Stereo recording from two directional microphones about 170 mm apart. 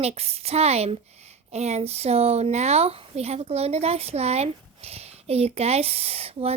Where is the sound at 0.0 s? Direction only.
35° right (ahead or behind).